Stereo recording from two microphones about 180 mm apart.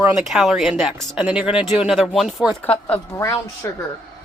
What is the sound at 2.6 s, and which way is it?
Speech, 10° left (ahead or behind).